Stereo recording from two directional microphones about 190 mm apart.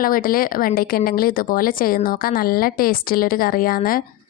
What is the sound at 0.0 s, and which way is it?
A woman's voice, 50° left (ahead or behind).